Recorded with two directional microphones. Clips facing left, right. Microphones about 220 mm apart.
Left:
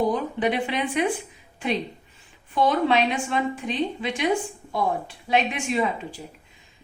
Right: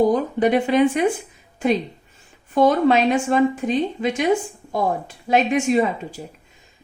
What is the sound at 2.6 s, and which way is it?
A woman's voice, 45° right (ahead or behind).